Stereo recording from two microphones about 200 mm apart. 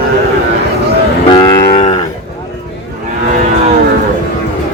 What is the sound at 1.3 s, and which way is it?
Moo, 25° left (ahead or behind).